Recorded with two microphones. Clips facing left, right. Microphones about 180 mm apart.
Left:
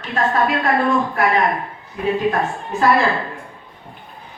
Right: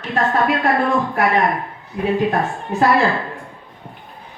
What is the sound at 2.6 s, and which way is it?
Speech, 20° right (ahead or behind).